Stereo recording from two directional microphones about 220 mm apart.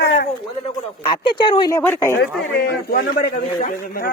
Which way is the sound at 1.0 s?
20° left (ahead or behind).